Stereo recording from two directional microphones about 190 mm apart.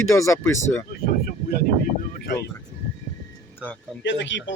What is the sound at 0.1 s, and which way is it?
Speech, 15° left (ahead or behind).